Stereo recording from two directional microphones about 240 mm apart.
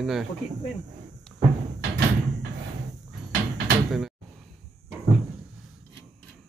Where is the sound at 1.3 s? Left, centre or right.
Centre.